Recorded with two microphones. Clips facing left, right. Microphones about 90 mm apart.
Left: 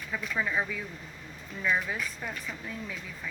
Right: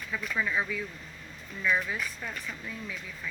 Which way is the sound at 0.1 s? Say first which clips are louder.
Even; 35° left (ahead or behind).